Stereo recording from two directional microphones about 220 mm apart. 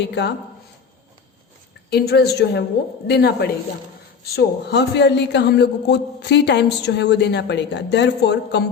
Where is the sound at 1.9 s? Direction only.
45° left (ahead or behind).